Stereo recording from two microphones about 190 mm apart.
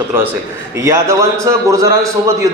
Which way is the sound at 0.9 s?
15° right (ahead or behind).